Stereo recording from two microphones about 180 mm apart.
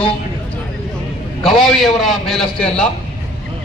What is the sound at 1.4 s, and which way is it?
A man's voice, centre (ahead or behind).